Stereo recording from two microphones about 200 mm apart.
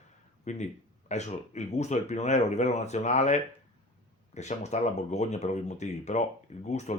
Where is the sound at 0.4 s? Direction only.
35° left (ahead or behind).